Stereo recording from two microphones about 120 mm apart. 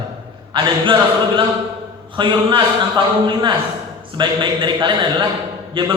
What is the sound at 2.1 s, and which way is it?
A man's voice, 40° right (ahead or behind).